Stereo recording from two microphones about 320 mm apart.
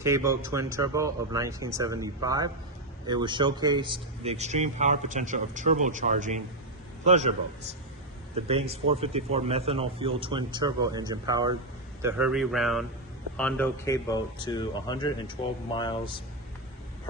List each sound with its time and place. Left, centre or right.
0.0 s a man's voice: centre
8.7 s a man's voice: centre